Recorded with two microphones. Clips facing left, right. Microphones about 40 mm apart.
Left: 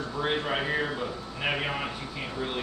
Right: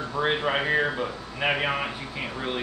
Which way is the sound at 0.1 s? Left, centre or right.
Right.